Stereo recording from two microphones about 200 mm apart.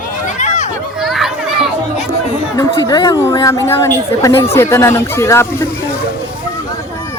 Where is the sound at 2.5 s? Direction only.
15° left (ahead or behind).